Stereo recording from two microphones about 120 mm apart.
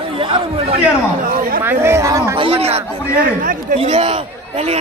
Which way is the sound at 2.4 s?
55° right (ahead or behind).